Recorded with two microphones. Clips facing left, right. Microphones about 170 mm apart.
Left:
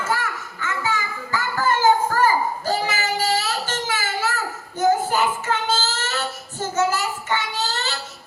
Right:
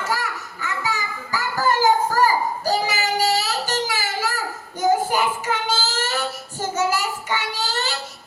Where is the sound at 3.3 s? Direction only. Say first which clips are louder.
Right 1 dB; 40° right (ahead or behind).